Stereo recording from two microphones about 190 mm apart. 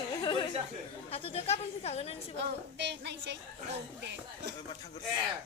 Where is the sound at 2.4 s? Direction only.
65° right (ahead or behind).